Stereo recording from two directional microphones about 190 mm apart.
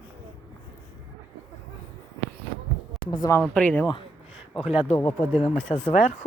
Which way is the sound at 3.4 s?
5° left (ahead or behind).